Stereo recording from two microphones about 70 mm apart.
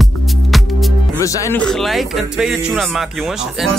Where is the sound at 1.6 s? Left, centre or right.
Centre.